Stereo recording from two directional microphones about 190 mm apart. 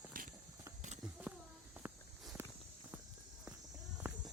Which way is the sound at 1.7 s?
10° right (ahead or behind).